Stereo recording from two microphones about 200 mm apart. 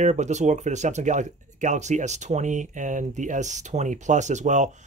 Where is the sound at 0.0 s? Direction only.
35° right (ahead or behind).